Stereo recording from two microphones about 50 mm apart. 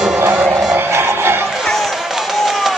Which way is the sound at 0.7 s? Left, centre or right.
Right.